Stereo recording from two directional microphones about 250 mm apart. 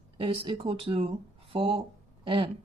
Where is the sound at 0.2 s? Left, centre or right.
Right.